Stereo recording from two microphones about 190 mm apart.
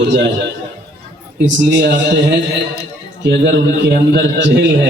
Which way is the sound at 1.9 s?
70° right (ahead or behind).